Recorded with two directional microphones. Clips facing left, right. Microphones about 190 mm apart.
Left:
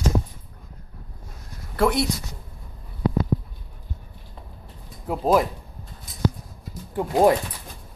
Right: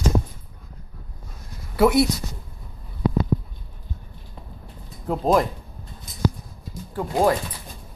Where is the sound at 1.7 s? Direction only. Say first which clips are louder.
Right 4 dB; 5° right (ahead or behind).